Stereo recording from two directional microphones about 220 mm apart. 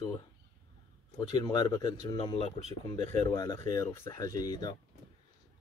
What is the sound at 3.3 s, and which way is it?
Speech, 15° left (ahead or behind).